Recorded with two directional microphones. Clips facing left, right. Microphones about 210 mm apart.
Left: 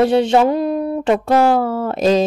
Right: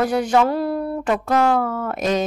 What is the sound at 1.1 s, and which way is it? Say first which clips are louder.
Speech: left 5 dB; 30° left (ahead or behind).